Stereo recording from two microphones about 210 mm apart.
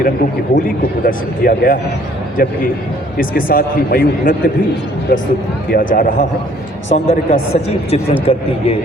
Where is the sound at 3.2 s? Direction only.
40° left (ahead or behind).